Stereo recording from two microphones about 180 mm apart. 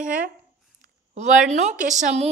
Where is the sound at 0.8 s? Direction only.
40° right (ahead or behind).